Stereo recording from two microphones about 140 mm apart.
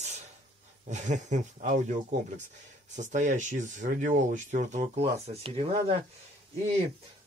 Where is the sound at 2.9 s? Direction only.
60° right (ahead or behind); by 6.0 s 40° right (ahead or behind).